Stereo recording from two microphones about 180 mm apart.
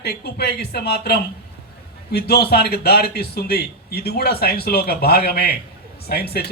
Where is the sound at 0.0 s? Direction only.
65° left (ahead or behind).